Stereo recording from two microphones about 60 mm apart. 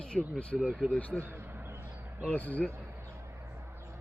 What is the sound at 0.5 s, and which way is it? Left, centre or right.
Speech, centre.